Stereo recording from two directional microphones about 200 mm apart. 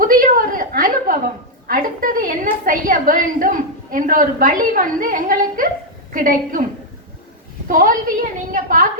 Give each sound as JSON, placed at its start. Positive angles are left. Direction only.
{"t": 0.0, "sound": "a sound", "side_deg": -45}
{"t": 1.6, "sound": "a woman's voice", "side_deg": -45}
{"t": 7.7, "sound": "a woman's voice", "side_deg": -45}